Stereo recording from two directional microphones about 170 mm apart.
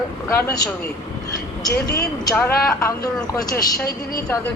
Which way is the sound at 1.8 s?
70° left (ahead or behind).